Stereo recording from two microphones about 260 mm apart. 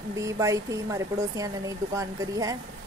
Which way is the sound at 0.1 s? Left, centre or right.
Centre.